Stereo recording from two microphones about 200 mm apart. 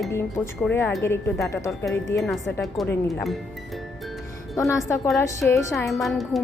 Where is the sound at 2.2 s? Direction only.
Centre (ahead or behind).